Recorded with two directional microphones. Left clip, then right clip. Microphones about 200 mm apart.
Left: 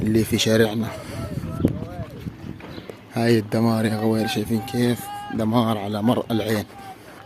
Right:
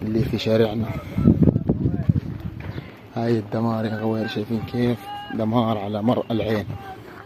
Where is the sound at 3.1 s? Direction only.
45° left (ahead or behind).